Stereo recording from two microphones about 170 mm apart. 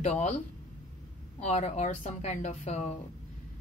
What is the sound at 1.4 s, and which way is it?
Speech, 40° left (ahead or behind).